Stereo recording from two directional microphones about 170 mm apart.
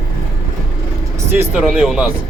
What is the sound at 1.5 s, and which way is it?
Speech, 5° right (ahead or behind).